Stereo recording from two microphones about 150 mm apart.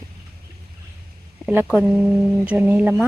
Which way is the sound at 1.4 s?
10° right (ahead or behind).